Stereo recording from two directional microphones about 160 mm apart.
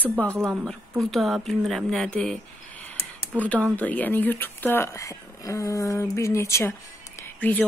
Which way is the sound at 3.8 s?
10° left (ahead or behind).